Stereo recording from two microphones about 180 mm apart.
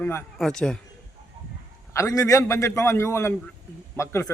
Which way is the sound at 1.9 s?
20° left (ahead or behind).